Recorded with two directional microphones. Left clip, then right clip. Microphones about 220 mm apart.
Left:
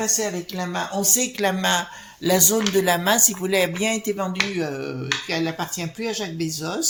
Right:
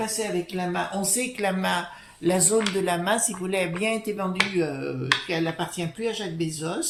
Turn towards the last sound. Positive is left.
turn(degrees=35)  # may be behind; listen again after turning